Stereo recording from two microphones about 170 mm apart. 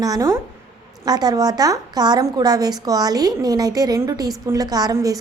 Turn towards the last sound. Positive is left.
turn(degrees=-20)  # may be behind; listen again after turning